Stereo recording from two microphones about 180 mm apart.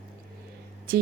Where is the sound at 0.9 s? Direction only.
55° right (ahead or behind).